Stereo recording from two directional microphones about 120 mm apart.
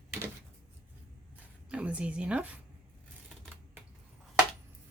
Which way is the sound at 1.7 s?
10° right (ahead or behind).